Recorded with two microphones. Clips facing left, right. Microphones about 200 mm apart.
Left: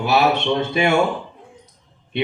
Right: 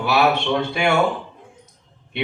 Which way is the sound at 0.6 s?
20° left (ahead or behind).